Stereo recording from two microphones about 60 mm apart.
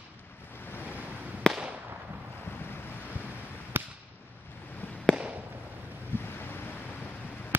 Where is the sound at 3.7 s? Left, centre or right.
Right.